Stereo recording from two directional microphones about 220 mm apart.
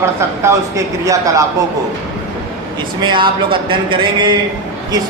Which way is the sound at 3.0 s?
20° right (ahead or behind).